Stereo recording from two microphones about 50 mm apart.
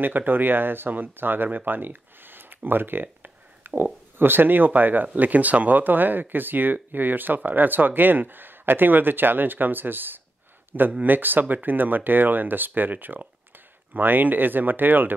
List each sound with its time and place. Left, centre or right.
0.0 s speech: right